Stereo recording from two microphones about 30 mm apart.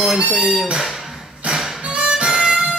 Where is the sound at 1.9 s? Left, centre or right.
Right.